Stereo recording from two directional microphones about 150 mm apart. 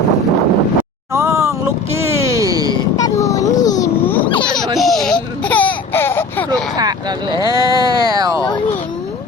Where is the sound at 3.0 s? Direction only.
20° left (ahead or behind).